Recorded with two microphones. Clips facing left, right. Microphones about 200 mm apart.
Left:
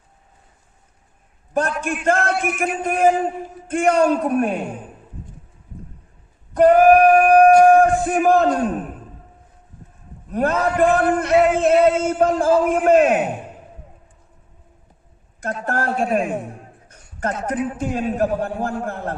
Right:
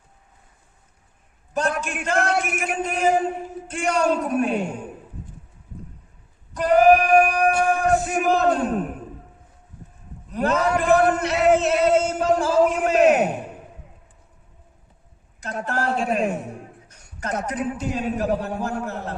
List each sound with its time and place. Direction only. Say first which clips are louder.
1.5 s a man's voice: left 3 dB; 55° left (ahead or behind)
6.5 s speech: left 4 dB; 55° left (ahead or behind)
10.2 s speech: left 2 dB; 50° left (ahead or behind)
15.6 s speech: left 2 dB; 50° left (ahead or behind)
16.9 s a sound: left 7 dB; 50° left (ahead or behind)
17.4 s speech: left 4 dB; 50° left (ahead or behind)